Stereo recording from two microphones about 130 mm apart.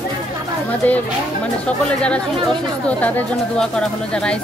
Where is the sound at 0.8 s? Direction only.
10° left (ahead or behind).